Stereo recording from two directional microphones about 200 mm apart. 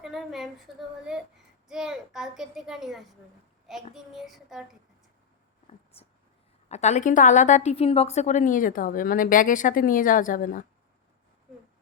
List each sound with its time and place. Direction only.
0.0 s a woman's voice: centre (ahead or behind)
6.7 s a woman's voice: 35° left (ahead or behind)